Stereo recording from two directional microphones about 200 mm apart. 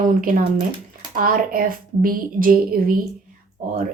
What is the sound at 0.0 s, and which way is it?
A woman's voice, 45° right (ahead or behind).